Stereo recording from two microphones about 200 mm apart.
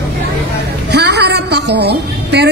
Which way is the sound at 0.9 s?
55° right (ahead or behind).